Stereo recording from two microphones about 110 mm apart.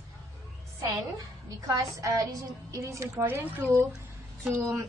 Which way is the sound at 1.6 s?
30° right (ahead or behind).